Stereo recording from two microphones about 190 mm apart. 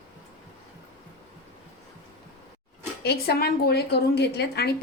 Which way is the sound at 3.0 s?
55° left (ahead or behind).